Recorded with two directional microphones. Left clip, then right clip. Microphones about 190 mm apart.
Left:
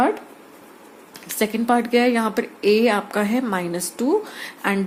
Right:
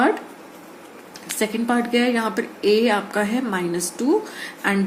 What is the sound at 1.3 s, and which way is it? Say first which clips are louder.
Speech: left 2 dB; 40° left (ahead or behind).